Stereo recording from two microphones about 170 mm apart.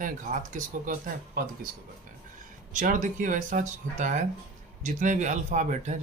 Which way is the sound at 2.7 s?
50° right (ahead or behind).